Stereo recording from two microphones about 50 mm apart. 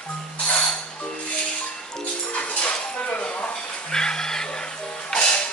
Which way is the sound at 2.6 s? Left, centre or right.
Left.